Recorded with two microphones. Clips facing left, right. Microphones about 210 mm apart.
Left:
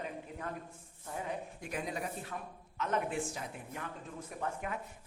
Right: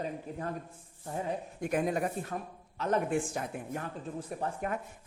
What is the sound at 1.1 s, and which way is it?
Speech, 35° right (ahead or behind).